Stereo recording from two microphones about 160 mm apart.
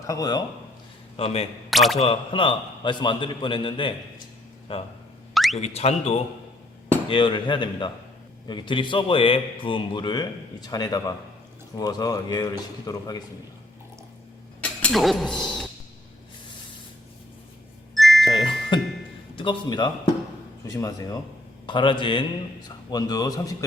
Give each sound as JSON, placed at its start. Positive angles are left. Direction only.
{"t": 0.1, "sound": "a man's voice", "side_deg": 25}
{"t": 1.1, "sound": "a man's voice", "side_deg": 40}
{"t": 1.7, "sound": "speech", "side_deg": 0}
{"t": 2.0, "sound": "a man's voice", "side_deg": 35}
{"t": 5.3, "sound": "car alarm", "side_deg": 0}
{"t": 5.5, "sound": "a man's voice", "side_deg": 40}
{"t": 14.6, "sound": "a sound", "side_deg": 5}
{"t": 17.9, "sound": "music", "side_deg": 0}
{"t": 18.7, "sound": "music", "side_deg": 30}
{"t": 19.4, "sound": "a man's voice", "side_deg": 30}